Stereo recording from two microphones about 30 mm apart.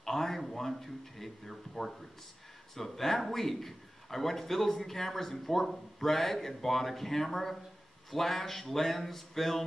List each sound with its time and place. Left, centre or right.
0.0 s a man's voice: centre